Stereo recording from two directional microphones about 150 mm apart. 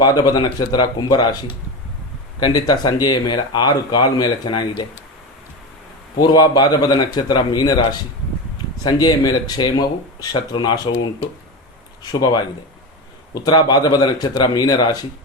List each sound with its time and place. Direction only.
0.0 s speech: 25° left (ahead or behind)
2.4 s speech: 25° left (ahead or behind)
6.1 s speech: 30° left (ahead or behind)
13.3 s speech: 30° left (ahead or behind)